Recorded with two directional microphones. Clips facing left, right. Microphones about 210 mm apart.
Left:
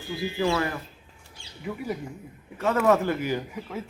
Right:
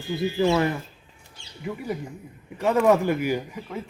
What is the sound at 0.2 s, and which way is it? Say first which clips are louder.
Speech: right 4 dB; 25° right (ahead or behind).